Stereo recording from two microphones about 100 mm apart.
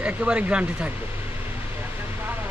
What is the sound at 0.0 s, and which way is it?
Speech, 10° right (ahead or behind).